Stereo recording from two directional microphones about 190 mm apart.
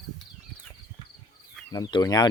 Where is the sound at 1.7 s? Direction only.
20° left (ahead or behind).